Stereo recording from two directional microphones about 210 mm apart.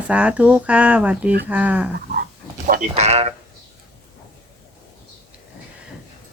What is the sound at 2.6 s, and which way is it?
Speech, 35° right (ahead or behind).